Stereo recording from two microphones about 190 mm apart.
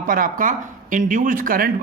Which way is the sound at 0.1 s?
45° right (ahead or behind).